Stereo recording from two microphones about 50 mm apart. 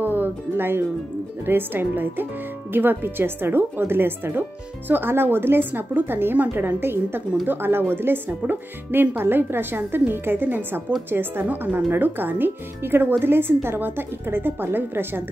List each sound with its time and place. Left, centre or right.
0.0 s music: right
1.4 s speech: right
8.4 s speech: right
11.4 s speech: right